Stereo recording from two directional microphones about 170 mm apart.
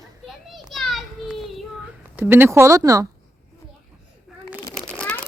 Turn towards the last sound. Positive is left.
turn(degrees=5)  # may be behind; listen again after turning